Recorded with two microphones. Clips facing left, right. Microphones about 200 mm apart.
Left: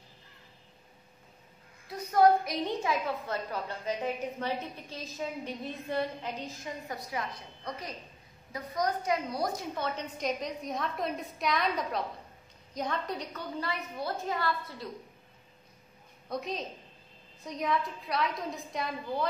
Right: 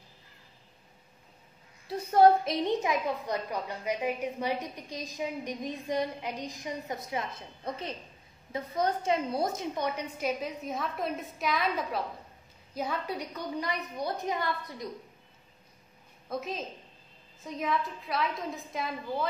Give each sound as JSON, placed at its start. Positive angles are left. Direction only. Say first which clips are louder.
{"t": 1.9, "sound": "a woman's voice", "louder": "right 2 dB", "side_deg": -30}
{"t": 16.3, "sound": "a woman's voice", "louder": "even", "side_deg": 0}